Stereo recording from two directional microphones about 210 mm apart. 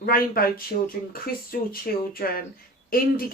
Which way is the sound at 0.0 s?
45° left (ahead or behind).